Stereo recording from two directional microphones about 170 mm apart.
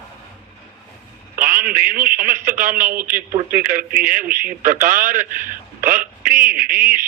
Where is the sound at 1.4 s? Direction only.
55° right (ahead or behind).